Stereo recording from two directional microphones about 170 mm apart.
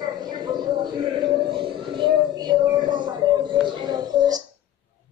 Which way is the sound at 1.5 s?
30° right (ahead or behind).